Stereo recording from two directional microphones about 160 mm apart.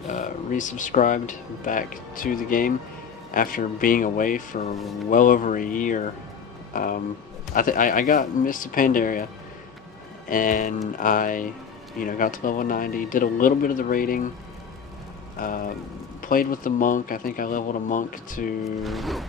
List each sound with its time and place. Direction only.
0.1 s speech: 50° left (ahead or behind)
15.3 s speech: 60° left (ahead or behind)
18.8 s music: centre (ahead or behind)